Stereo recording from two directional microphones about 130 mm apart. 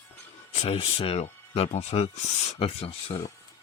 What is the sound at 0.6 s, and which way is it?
Speech, 50° left (ahead or behind).